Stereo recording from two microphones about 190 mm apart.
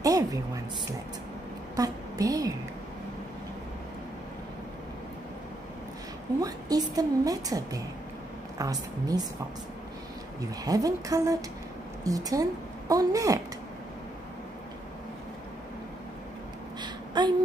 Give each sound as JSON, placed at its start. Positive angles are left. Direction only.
{"t": 0.0, "sound": "music", "side_deg": -20}
{"t": 1.8, "sound": "speech", "side_deg": -20}
{"t": 6.4, "sound": "a woman's voice", "side_deg": -20}
{"t": 10.4, "sound": "a woman's voice", "side_deg": -20}
{"t": 16.8, "sound": "a sound", "side_deg": -25}